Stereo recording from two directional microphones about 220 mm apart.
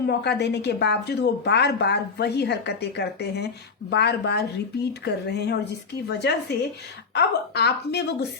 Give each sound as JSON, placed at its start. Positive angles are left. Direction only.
{"t": 0.0, "sound": "a woman's voice", "side_deg": 50}